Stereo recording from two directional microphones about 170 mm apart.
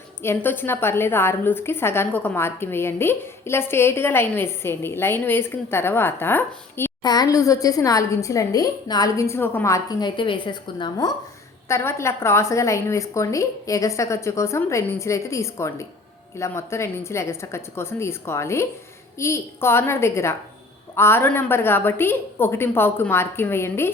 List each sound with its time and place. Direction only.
0.2 s a woman's voice: 10° left (ahead or behind)
7.0 s a woman's voice: 25° left (ahead or behind)
11.7 s a woman's voice: 15° left (ahead or behind)